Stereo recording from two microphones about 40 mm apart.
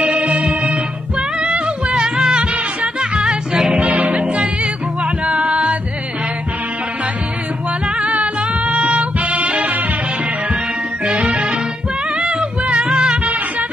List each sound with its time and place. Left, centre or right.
0.0 s music: right
3.8 s music: right
8.0 s music: right
11.1 s music: right
13.2 s music: right